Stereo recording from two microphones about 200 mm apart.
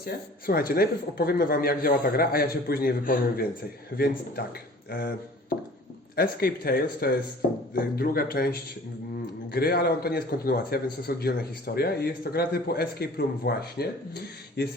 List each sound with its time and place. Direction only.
0.0 s a man's voice: 50° left (ahead or behind)
6.1 s a man's voice: 50° left (ahead or behind)